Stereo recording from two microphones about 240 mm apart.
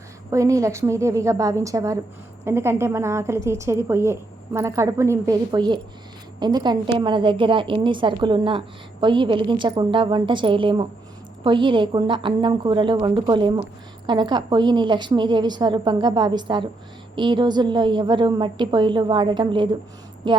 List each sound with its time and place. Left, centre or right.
0.3 s a woman's voice: centre